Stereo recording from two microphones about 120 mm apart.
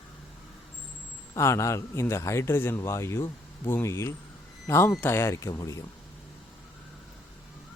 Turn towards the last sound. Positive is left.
turn(degrees=25)  # may be behind; listen again after turning